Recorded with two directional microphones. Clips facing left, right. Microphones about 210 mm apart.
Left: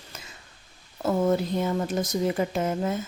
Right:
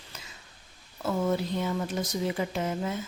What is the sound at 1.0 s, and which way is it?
Speech, 45° left (ahead or behind).